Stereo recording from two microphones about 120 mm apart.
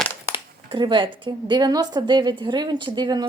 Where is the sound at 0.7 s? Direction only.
40° right (ahead or behind).